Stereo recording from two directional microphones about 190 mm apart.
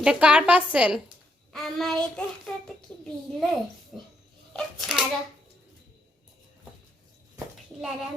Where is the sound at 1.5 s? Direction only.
Centre (ahead or behind).